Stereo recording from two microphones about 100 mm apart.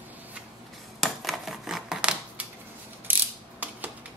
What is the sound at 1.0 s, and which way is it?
Typewriter, centre (ahead or behind).